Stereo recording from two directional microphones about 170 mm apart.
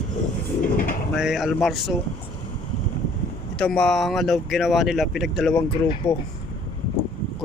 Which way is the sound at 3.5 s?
5° left (ahead or behind).